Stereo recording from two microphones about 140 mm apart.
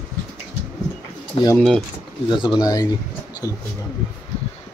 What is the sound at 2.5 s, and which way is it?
Speech, 25° left (ahead or behind).